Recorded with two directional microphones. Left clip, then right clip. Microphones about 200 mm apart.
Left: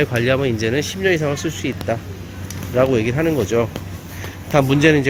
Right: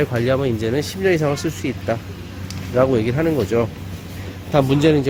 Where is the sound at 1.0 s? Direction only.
15° right (ahead or behind).